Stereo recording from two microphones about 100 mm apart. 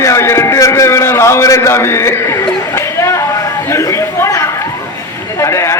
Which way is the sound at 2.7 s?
25° left (ahead or behind).